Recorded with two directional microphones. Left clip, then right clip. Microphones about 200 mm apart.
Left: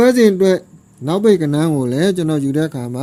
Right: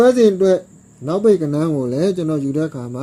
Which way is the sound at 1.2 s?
35° left (ahead or behind).